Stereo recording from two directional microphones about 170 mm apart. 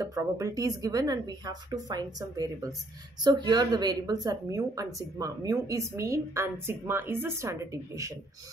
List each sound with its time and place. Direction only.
0.0 s a woman's voice: 20° right (ahead or behind)